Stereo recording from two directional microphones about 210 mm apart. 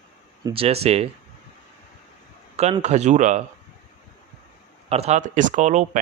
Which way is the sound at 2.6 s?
30° right (ahead or behind).